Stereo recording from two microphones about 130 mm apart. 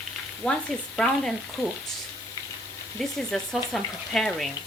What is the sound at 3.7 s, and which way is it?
Speech, 5° left (ahead or behind).